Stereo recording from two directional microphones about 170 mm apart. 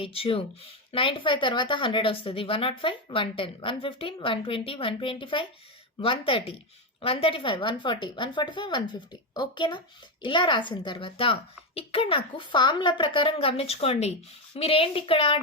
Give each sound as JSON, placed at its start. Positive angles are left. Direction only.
{"t": 0.0, "sound": "a woman's voice", "side_deg": 35}